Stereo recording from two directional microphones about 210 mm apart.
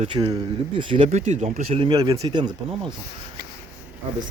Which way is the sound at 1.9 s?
15° right (ahead or behind).